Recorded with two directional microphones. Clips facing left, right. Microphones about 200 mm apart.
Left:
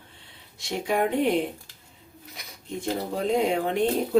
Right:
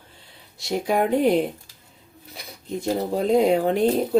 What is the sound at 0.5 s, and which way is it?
Speech, 35° right (ahead or behind).